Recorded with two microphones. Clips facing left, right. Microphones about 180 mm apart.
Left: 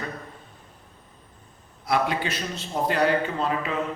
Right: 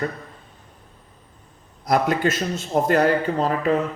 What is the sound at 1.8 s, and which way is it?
A man's voice, 45° right (ahead or behind).